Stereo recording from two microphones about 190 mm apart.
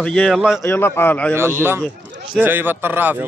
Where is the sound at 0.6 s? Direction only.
10° left (ahead or behind).